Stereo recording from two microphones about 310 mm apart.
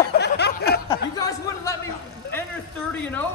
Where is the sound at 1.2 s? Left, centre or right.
Centre.